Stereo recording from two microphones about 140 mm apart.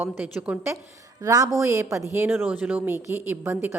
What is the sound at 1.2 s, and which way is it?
A woman's voice, 25° right (ahead or behind).